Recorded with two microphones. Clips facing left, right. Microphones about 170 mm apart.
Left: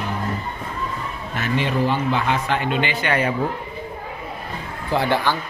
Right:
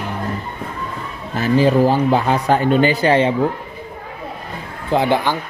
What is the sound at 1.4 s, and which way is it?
Speech, 35° right (ahead or behind).